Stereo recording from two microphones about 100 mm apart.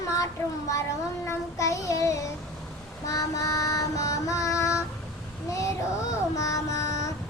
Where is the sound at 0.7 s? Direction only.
30° left (ahead or behind).